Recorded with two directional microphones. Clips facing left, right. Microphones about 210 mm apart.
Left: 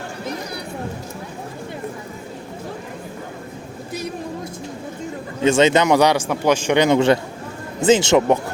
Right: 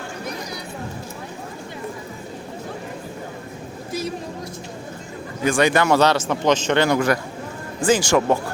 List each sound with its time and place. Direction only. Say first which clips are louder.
5.4 s a man's voice: left 3 dB; 25° left (ahead or behind)